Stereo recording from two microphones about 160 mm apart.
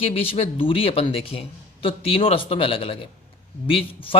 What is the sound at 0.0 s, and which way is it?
Speech, 35° left (ahead or behind).